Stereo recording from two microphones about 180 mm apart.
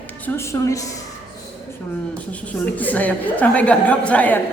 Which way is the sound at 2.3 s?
10° left (ahead or behind).